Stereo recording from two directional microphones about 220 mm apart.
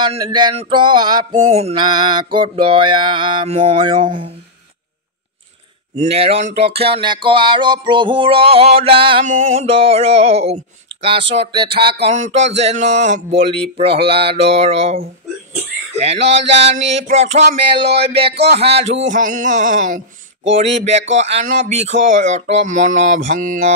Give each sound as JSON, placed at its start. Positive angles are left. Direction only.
{"t": 0.0, "sound": "music", "side_deg": -20}
{"t": 5.9, "sound": "music", "side_deg": -25}
{"t": 16.3, "sound": "music", "side_deg": -25}
{"t": 17.6, "sound": "a sound", "side_deg": -50}
{"t": 17.9, "sound": "music", "side_deg": -25}
{"t": 18.6, "sound": "speech", "side_deg": -25}
{"t": 21.1, "sound": "speech", "side_deg": -30}